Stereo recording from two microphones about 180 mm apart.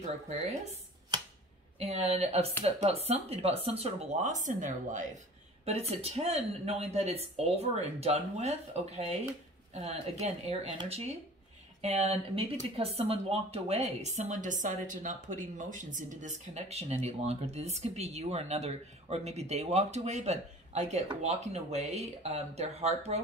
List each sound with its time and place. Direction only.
1.8 s speech: 40° right (ahead or behind)
5.7 s speech: 35° right (ahead or behind)